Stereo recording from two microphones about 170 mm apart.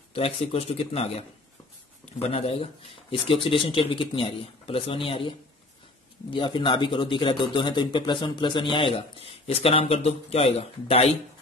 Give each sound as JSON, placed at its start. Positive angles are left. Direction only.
{"t": 0.1, "sound": "speech", "side_deg": 35}
{"t": 6.3, "sound": "speech", "side_deg": 30}